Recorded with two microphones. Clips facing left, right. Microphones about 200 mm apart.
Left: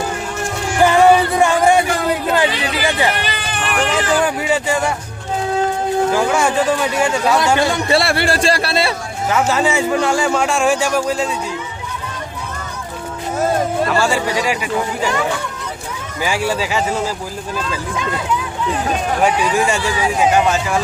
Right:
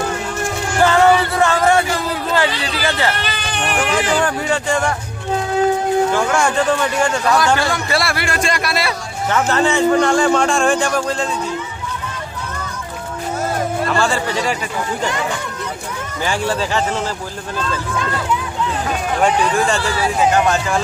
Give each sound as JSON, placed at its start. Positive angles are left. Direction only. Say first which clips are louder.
{"t": 0.8, "sound": "music", "louder": "left 2 dB", "side_deg": 15}
{"t": 2.3, "sound": "hubbub", "louder": "left 2 dB", "side_deg": 20}
{"t": 3.5, "sound": "a sound", "louder": "even", "side_deg": 5}
{"t": 6.1, "sound": "a man's voice", "louder": "left 1 dB", "side_deg": 5}
{"t": 7.3, "sound": "a man's voice", "louder": "left 1 dB", "side_deg": 25}
{"t": 9.3, "sound": "a man's voice", "louder": "even", "side_deg": 5}
{"t": 13.8, "sound": "a man's voice", "louder": "left 1 dB", "side_deg": 10}
{"t": 16.2, "sound": "a man's voice", "louder": "left 1 dB", "side_deg": 10}
{"t": 19.2, "sound": "a man's voice", "louder": "right 1 dB", "side_deg": 10}